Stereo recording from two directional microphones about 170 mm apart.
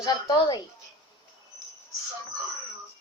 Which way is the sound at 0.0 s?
20° left (ahead or behind).